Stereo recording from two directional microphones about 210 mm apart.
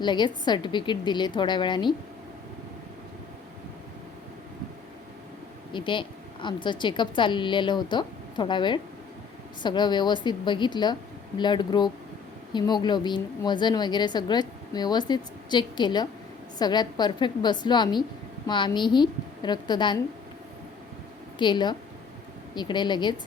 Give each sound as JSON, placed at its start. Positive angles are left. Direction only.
{"t": 0.0, "sound": "a woman's voice", "side_deg": 20}
{"t": 5.7, "sound": "a woman's voice", "side_deg": 20}
{"t": 21.3, "sound": "a woman's voice", "side_deg": 20}